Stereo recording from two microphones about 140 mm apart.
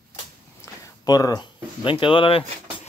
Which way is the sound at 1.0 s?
25° left (ahead or behind).